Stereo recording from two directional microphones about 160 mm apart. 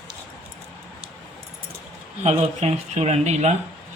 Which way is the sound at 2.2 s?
45° right (ahead or behind).